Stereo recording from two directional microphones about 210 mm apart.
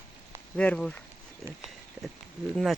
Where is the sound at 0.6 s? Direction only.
5° left (ahead or behind).